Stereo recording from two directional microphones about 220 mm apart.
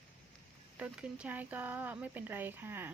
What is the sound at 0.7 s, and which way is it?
A woman's voice, 5° right (ahead or behind).